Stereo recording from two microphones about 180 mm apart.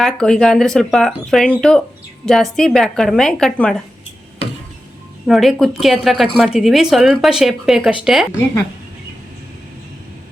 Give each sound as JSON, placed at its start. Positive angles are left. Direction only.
{"t": 0.0, "sound": "speech", "side_deg": 5}
{"t": 5.2, "sound": "speech", "side_deg": 0}